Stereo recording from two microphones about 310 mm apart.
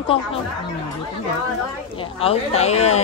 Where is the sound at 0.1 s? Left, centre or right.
Centre.